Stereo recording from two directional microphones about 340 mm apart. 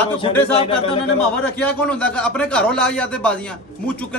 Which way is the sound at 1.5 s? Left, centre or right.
Centre.